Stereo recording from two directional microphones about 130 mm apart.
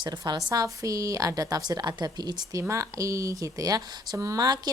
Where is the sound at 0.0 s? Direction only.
35° right (ahead or behind).